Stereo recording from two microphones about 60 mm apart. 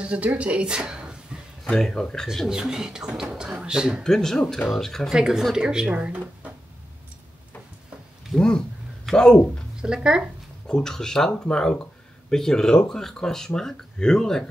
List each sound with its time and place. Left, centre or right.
0.0 s a woman's voice: centre
1.6 s speech: centre
2.5 s speech: centre
4.0 s speech: centre
5.1 s speech: centre
8.4 s speech: centre
9.8 s speech: centre
10.7 s speech: centre